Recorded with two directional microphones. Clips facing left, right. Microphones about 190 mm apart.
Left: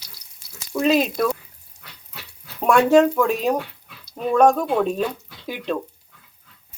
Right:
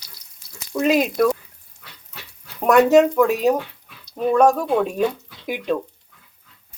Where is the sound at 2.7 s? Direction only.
5° right (ahead or behind).